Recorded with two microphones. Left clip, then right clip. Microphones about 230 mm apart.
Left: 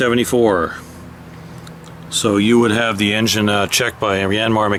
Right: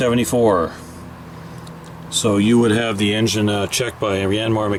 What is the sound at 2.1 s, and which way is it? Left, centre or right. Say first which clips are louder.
Speech: left 2 dB; centre.